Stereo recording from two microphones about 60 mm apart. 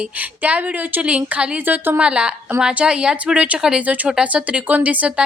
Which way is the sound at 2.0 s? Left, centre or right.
Centre.